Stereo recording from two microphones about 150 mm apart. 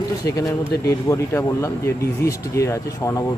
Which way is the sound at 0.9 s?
20° left (ahead or behind).